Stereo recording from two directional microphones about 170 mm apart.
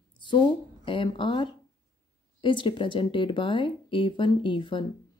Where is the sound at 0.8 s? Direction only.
30° left (ahead or behind).